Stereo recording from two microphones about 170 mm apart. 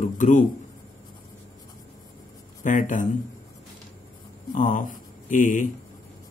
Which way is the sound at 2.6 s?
50° left (ahead or behind).